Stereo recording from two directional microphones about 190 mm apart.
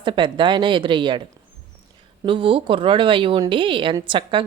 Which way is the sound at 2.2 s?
25° right (ahead or behind).